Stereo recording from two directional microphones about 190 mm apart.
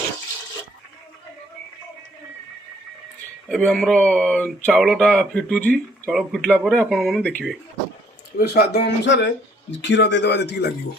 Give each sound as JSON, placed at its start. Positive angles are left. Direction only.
{"t": 3.5, "sound": "speech", "side_deg": 0}
{"t": 8.4, "sound": "speech", "side_deg": 60}